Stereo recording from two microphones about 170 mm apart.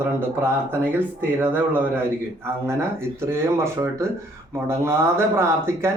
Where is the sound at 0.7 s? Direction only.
10° right (ahead or behind).